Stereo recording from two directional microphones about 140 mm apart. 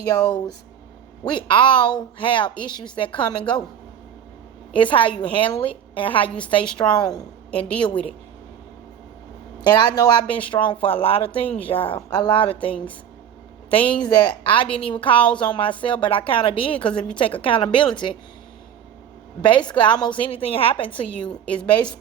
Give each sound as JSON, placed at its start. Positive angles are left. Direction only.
{"t": 0.1, "sound": "a woman's voice", "side_deg": 30}
{"t": 4.7, "sound": "a woman's voice", "side_deg": 35}
{"t": 9.6, "sound": "a woman's voice", "side_deg": 30}
{"t": 14.0, "sound": "a woman's voice", "side_deg": 30}
{"t": 19.4, "sound": "a woman's voice", "side_deg": 35}